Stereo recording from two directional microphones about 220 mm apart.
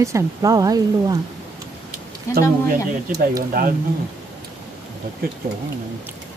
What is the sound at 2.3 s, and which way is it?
Speech, 15° left (ahead or behind).